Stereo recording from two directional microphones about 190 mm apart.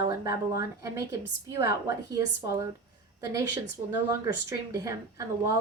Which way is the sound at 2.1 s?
15° right (ahead or behind).